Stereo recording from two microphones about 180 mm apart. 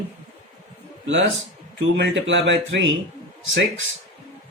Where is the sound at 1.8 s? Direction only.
90° right.